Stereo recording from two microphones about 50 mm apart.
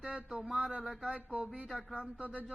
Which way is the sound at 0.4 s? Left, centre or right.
Centre.